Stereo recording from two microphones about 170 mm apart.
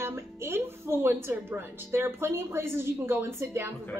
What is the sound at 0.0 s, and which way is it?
A woman's voice, 15° right (ahead or behind).